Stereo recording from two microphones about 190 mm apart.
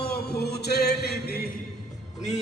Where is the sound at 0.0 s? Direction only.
55° left (ahead or behind).